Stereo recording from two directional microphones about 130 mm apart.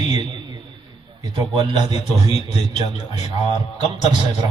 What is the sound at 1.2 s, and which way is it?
Speech, 35° right (ahead or behind).